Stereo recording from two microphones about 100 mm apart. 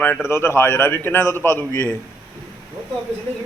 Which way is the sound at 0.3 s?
25° left (ahead or behind).